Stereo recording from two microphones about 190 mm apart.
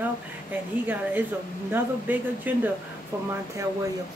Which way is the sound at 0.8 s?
10° right (ahead or behind).